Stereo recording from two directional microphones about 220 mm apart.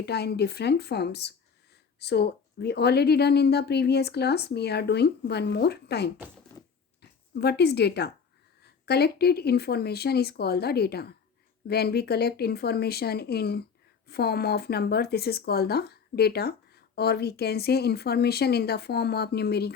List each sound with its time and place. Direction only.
0.0 s speech: 50° left (ahead or behind)